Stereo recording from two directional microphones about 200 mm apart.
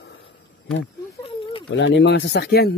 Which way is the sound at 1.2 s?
25° left (ahead or behind).